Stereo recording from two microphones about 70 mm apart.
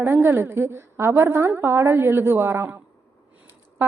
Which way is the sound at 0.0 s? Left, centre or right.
Right.